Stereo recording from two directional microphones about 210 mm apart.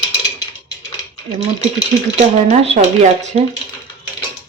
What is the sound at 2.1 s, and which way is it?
Speech, 30° right (ahead or behind).